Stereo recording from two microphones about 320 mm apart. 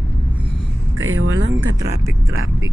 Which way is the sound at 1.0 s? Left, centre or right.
Right.